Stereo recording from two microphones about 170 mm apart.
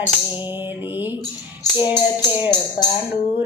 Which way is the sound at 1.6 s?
25° left (ahead or behind).